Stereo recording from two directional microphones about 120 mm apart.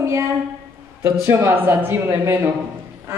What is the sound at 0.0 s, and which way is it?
A woman's voice, 25° right (ahead or behind).